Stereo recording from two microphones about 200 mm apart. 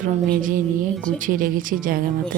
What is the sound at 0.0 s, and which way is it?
Speech, 40° right (ahead or behind).